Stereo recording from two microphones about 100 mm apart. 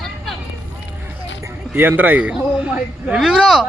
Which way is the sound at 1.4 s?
20° right (ahead or behind).